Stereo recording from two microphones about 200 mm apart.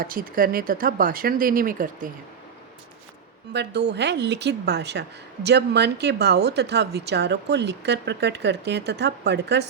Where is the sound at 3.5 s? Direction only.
55° right (ahead or behind).